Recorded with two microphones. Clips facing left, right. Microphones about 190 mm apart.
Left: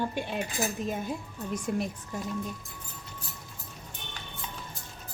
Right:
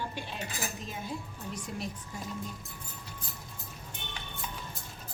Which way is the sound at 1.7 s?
55° left (ahead or behind).